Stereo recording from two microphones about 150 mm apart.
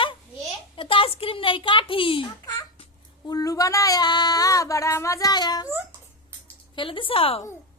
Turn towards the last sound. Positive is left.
turn(degrees=40)  # may be behind; listen again after turning